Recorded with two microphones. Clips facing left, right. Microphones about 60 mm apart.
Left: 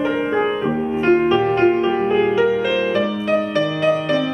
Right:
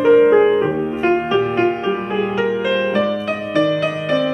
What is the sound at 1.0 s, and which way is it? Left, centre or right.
Music, centre.